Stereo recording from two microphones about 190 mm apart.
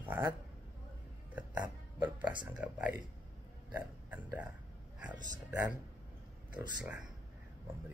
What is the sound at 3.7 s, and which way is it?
Burping, 10° right (ahead or behind).